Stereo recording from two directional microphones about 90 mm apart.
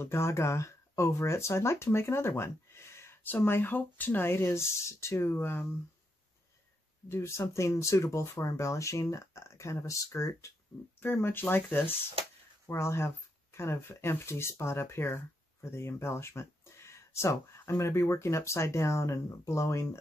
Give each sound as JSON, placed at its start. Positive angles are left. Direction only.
{"t": 0.0, "sound": "speech", "side_deg": 30}
{"t": 7.1, "sound": "speech", "side_deg": 30}